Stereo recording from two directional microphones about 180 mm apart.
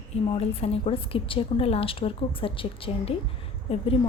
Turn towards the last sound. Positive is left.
turn(degrees=35)  # may be behind; listen again after turning